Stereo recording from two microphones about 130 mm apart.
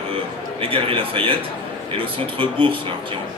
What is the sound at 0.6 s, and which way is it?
A man's voice, 45° right (ahead or behind).